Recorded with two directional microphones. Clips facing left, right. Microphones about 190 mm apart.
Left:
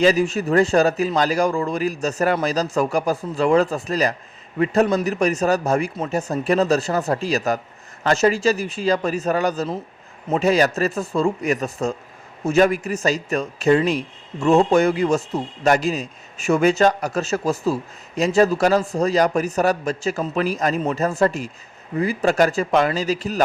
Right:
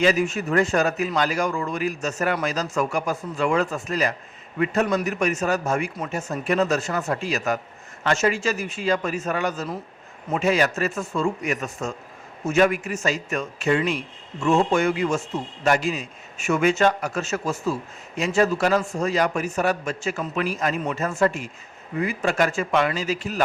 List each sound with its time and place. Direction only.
0.0 s a man's voice: 35° left (ahead or behind)